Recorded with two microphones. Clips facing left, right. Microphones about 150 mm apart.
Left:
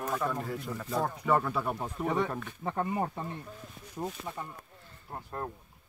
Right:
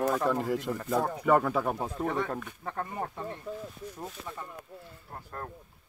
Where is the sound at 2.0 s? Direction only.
15° left (ahead or behind).